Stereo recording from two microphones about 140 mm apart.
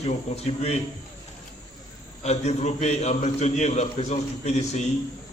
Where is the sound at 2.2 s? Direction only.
55° left (ahead or behind).